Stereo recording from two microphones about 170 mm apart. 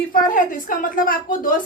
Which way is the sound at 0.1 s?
55° left (ahead or behind).